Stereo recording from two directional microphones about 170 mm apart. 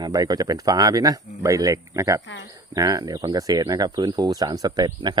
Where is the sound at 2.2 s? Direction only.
90° left.